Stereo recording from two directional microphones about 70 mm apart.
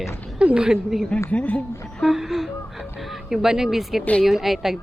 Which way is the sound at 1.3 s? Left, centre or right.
Centre.